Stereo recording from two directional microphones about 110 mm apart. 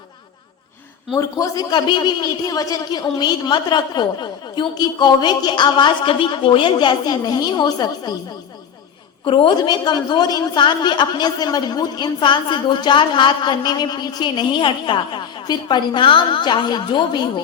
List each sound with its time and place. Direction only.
1.1 s a woman's voice: 35° left (ahead or behind)
9.2 s a woman's voice: 50° left (ahead or behind)